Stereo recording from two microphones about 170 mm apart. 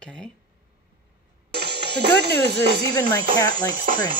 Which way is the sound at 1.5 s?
75° right (ahead or behind).